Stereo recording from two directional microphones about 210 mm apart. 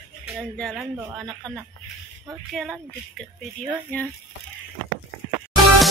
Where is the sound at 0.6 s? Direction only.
Centre (ahead or behind).